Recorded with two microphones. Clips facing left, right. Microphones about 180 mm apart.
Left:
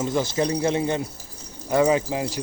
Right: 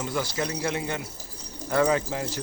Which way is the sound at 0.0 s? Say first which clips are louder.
Left 6 dB; 20° left (ahead or behind).